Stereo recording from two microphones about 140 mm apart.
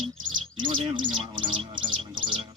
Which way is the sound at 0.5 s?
35° right (ahead or behind).